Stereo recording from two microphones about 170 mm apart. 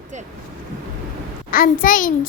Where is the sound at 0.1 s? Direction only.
45° right (ahead or behind).